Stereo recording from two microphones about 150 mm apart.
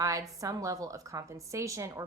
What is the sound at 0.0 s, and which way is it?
A woman's voice, 20° right (ahead or behind).